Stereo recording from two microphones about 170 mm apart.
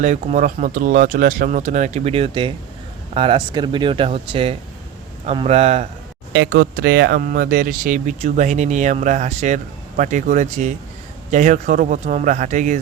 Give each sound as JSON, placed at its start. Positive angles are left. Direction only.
{"t": 0.0, "sound": "speech", "side_deg": -45}
{"t": 6.3, "sound": "speech", "side_deg": -80}